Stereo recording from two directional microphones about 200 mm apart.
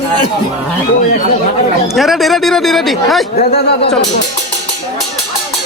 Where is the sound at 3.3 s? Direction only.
50° left (ahead or behind).